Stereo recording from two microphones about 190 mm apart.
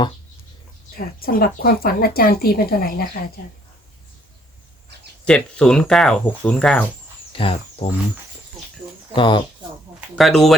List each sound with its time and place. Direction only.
0.9 s speech: 50° left (ahead or behind)
5.2 s speech: 5° left (ahead or behind)
7.3 s speech: 30° left (ahead or behind)
9.1 s speech: 25° left (ahead or behind)
10.2 s speech: centre (ahead or behind)